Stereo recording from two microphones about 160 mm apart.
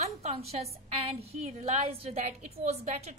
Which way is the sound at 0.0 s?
40° right (ahead or behind).